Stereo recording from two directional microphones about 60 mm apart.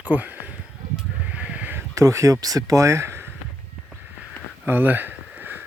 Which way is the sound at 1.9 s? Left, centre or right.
Right.